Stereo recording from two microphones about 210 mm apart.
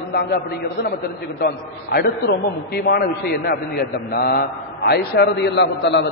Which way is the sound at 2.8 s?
50° left (ahead or behind).